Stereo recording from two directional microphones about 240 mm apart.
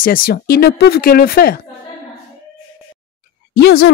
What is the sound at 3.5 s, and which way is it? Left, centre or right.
Speech, left.